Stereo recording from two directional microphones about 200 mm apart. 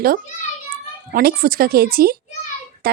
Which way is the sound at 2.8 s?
50° right (ahead or behind).